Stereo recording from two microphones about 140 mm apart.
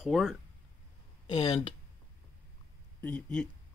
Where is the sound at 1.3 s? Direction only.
35° left (ahead or behind).